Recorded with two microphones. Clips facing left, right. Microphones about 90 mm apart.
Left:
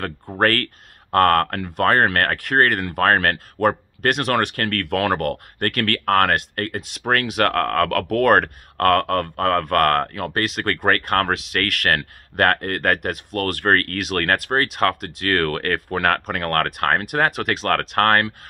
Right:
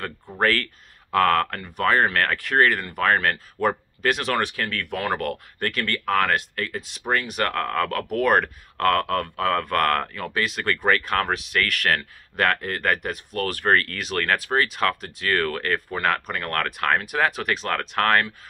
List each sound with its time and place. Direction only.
0.4 s speech: 60° left (ahead or behind)
2.8 s speech: 70° left (ahead or behind); by 18.3 s 55° left (ahead or behind)